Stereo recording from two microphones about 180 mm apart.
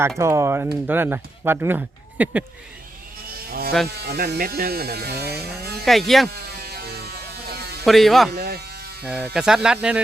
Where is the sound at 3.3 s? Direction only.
55° right (ahead or behind).